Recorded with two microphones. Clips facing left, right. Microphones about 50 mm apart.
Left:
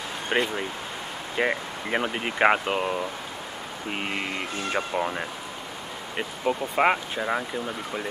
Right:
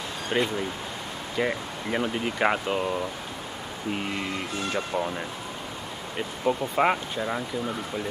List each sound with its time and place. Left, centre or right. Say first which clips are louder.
0.3 s speech: even; left
6.7 s speech: left 1 dB; centre